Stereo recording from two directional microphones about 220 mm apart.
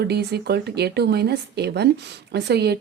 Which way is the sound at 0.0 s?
50° right (ahead or behind).